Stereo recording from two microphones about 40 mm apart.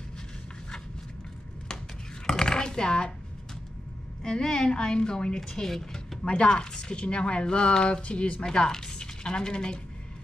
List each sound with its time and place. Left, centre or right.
2.2 s a sound: centre
4.2 s a woman's voice: centre
8.5 s speech: centre